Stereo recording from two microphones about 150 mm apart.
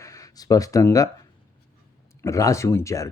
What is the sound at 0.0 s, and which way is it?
Speech, 20° left (ahead or behind).